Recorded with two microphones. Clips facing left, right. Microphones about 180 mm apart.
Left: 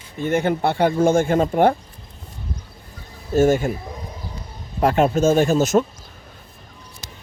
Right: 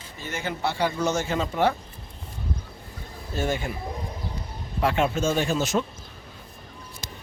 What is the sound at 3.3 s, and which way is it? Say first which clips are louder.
Speech: left 11 dB; 45° left (ahead or behind).